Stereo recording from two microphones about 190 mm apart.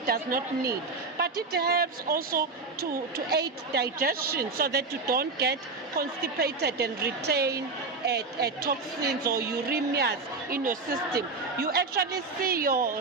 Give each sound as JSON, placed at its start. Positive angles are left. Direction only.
{"t": 0.0, "sound": "a woman's voice", "side_deg": -50}